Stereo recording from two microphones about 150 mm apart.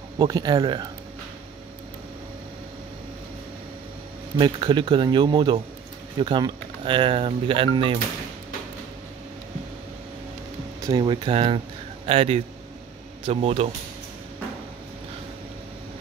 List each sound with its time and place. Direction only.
0.2 s speech: 30° right (ahead or behind)
4.4 s speech: 30° right (ahead or behind)
10.8 s speech: 30° right (ahead or behind)